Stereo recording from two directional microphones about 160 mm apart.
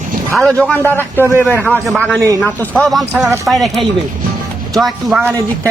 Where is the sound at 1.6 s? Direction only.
5° left (ahead or behind).